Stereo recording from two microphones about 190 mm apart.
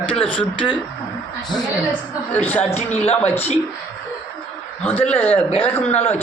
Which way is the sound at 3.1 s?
10° left (ahead or behind).